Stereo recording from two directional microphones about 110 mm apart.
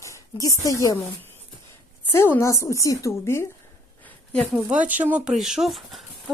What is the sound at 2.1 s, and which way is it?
A woman's voice, 20° left (ahead or behind).